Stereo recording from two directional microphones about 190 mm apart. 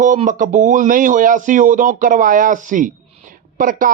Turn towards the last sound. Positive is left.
turn(degrees=-45)  # may be behind; listen again after turning